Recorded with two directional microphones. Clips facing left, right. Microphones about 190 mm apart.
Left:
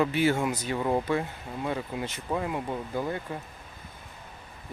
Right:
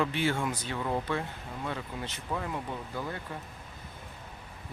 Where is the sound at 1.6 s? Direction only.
10° left (ahead or behind).